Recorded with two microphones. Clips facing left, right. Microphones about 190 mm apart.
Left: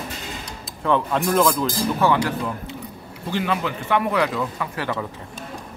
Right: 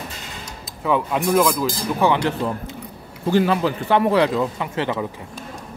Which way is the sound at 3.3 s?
40° right (ahead or behind).